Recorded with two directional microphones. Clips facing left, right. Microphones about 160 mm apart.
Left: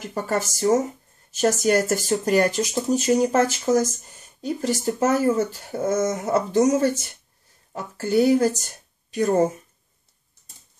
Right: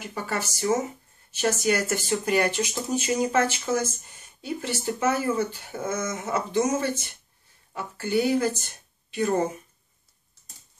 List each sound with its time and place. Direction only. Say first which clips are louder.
0.1 s a woman's voice: left 6 dB; 40° left (ahead or behind)